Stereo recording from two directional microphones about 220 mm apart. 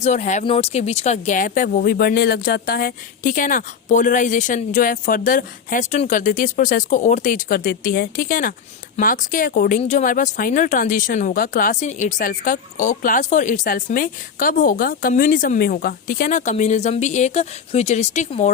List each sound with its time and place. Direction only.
0.0 s speech: 35° left (ahead or behind)